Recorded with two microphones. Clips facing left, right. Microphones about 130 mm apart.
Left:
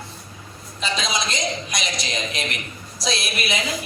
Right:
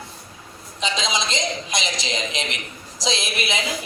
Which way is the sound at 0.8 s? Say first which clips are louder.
Right 1 dB; 20° right (ahead or behind).